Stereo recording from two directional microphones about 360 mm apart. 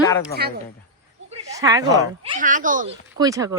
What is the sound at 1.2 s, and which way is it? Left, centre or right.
Speech, centre.